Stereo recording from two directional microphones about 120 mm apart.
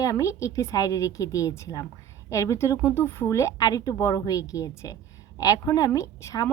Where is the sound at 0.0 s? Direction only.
30° left (ahead or behind).